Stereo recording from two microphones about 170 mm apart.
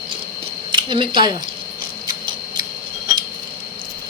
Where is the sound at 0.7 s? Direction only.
25° right (ahead or behind).